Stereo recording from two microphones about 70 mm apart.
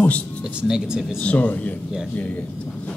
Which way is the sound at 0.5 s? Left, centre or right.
Centre.